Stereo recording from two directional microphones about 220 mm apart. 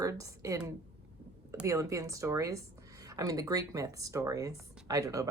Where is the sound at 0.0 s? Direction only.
15° right (ahead or behind).